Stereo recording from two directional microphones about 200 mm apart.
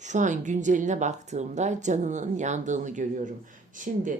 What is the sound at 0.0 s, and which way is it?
Speech, 40° right (ahead or behind).